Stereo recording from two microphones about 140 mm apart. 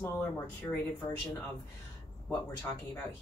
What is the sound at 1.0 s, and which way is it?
Speech, 20° left (ahead or behind).